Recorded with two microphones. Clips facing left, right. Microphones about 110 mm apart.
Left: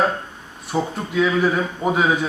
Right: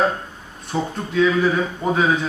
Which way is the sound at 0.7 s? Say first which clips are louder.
Left 1 dB; 10° left (ahead or behind).